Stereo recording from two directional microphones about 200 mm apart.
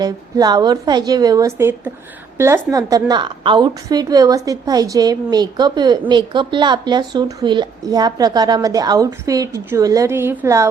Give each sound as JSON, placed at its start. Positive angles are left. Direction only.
{"t": 0.0, "sound": "a woman's voice", "side_deg": -20}